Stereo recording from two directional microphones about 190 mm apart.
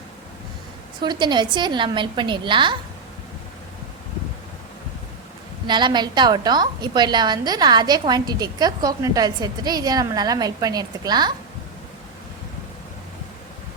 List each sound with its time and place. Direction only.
1.0 s a woman's voice: 25° right (ahead or behind)
5.6 s a woman's voice: 25° right (ahead or behind)